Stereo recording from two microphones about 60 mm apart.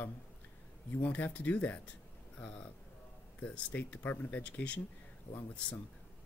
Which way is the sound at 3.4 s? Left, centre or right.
Left.